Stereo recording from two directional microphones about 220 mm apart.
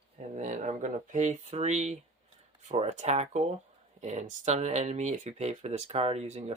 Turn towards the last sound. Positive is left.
turn(degrees=-30)  # may be behind; listen again after turning